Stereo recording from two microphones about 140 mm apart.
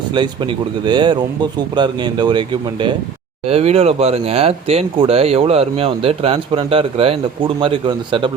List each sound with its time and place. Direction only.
0.9 s speech: 30° right (ahead or behind)
3.5 s speech: 45° right (ahead or behind)